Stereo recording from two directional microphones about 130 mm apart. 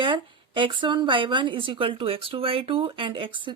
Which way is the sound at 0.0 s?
40° right (ahead or behind).